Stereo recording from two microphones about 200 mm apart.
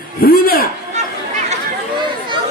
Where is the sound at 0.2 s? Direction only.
45° left (ahead or behind).